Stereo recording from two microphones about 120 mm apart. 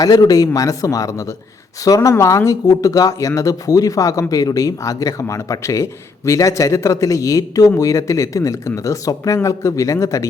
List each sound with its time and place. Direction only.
0.0 s speech: 30° left (ahead or behind)